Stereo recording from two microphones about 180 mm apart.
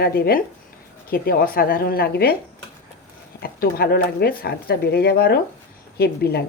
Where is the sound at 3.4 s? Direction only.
55° left (ahead or behind).